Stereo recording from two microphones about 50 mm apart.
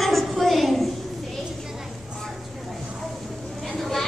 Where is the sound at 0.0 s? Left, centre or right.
Centre.